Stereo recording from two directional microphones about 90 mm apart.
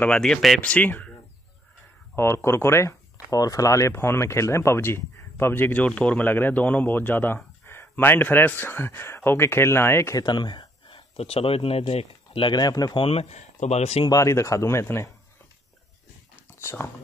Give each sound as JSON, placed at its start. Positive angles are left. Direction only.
{"t": 0.1, "sound": "speech", "side_deg": 5}
{"t": 0.6, "sound": "speech", "side_deg": 15}
{"t": 2.1, "sound": "speech", "side_deg": 30}
{"t": 10.1, "sound": "speech", "side_deg": 55}
{"t": 12.4, "sound": "speech", "side_deg": 55}
{"t": 12.9, "sound": "speech", "side_deg": 90}
{"t": 14.0, "sound": "speech", "side_deg": 35}
{"t": 16.5, "sound": "speech", "side_deg": 25}